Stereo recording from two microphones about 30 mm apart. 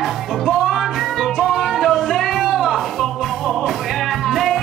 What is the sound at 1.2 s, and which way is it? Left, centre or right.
Music, centre.